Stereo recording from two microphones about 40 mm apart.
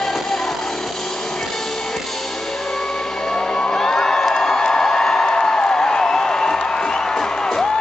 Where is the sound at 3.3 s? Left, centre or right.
Centre.